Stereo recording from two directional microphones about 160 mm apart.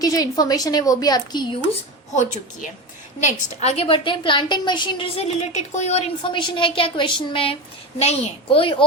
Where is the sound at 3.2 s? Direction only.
40° left (ahead or behind).